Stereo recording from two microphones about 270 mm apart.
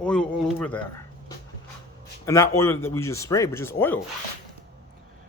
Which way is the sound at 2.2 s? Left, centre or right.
Centre.